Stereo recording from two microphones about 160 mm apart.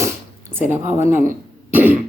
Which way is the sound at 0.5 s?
15° right (ahead or behind).